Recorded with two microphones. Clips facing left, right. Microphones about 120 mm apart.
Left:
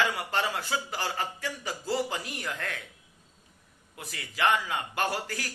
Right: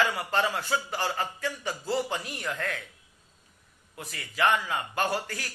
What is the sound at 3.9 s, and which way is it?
A man's voice, 30° right (ahead or behind).